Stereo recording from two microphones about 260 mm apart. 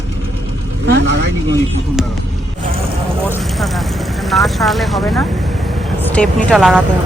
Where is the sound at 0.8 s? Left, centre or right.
Right.